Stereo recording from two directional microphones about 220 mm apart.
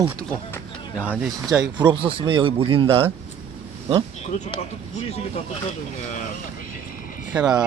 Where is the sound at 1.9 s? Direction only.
25° right (ahead or behind).